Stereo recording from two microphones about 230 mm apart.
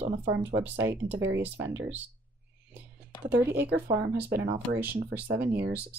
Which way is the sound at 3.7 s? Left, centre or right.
Centre.